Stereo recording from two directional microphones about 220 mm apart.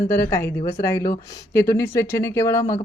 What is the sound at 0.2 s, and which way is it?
Speech, 10° left (ahead or behind).